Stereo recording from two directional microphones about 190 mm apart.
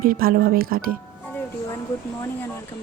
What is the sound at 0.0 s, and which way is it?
Speech, 50° right (ahead or behind).